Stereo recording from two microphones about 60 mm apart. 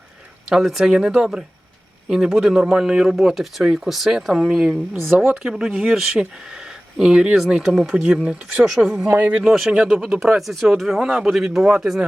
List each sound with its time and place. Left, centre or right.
0.5 s a man's voice: centre
8.6 s speech: centre
9.0 s speech: right
9.4 s a man's voice: centre
11.0 s a man's voice: centre